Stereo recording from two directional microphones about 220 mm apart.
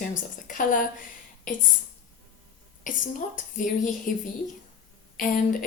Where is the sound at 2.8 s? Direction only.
35° left (ahead or behind).